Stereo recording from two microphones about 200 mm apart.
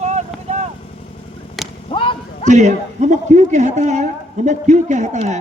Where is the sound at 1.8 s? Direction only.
25° left (ahead or behind).